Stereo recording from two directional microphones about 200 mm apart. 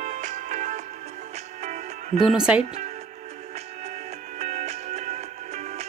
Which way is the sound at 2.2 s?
5° right (ahead or behind).